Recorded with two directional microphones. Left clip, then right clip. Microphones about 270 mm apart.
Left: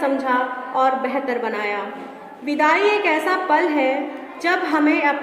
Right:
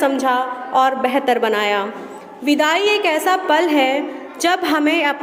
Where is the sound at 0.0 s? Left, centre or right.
Right.